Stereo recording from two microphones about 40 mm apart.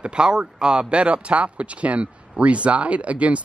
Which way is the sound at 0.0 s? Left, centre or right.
Right.